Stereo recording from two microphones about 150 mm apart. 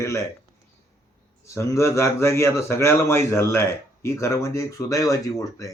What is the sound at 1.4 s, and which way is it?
Speech, 20° left (ahead or behind).